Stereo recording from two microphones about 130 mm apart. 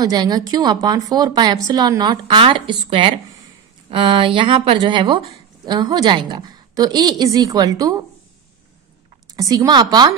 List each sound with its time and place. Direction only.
0.0 s a woman's voice: 30° right (ahead or behind)
9.3 s speech: 30° right (ahead or behind)